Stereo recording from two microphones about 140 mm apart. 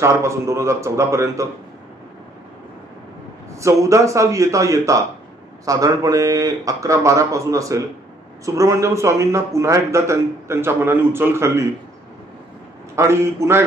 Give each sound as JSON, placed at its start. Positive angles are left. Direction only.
{"t": 0.0, "sound": "a man's voice", "side_deg": -20}
{"t": 3.5, "sound": "a man's voice", "side_deg": -20}
{"t": 12.9, "sound": "a man's voice", "side_deg": -20}